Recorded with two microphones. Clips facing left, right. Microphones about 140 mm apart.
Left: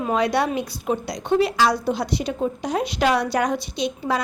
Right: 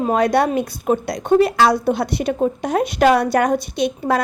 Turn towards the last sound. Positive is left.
turn(degrees=-55)  # may be behind; listen again after turning